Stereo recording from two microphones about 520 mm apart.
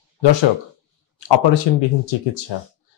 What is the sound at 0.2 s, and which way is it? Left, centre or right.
Speech, left.